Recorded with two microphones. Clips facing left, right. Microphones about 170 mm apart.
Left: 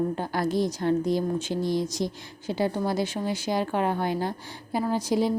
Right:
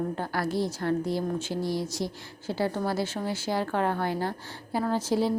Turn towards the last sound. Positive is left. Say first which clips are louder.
# left 1 dB
turn(degrees=15)  # may be behind; listen again after turning